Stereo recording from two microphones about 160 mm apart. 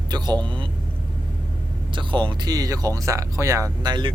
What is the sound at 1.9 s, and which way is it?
Speech, 30° right (ahead or behind).